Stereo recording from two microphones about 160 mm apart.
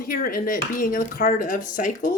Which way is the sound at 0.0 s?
65° left (ahead or behind).